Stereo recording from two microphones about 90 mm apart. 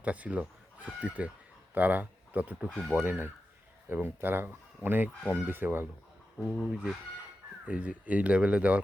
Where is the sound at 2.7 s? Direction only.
5° left (ahead or behind).